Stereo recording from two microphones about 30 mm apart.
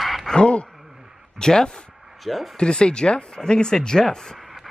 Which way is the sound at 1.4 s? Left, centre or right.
Left.